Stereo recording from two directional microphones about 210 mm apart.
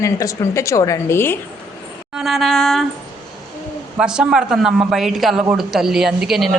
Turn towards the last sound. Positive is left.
turn(degrees=0)  # may be behind; listen again after turning